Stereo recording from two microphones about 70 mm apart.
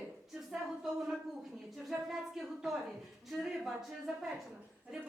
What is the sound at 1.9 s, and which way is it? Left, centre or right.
A woman's voice, centre.